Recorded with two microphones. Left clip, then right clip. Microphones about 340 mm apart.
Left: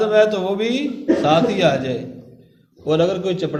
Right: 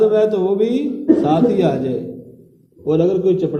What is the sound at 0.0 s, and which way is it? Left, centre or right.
A man's voice, left.